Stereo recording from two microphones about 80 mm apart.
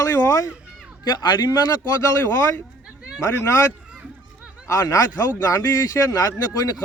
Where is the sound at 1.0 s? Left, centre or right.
Left.